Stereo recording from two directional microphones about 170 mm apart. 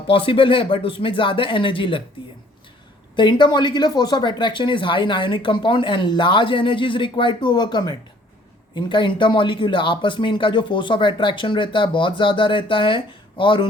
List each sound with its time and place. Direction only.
0.1 s speech: 30° left (ahead or behind)
3.2 s speech: 25° left (ahead or behind)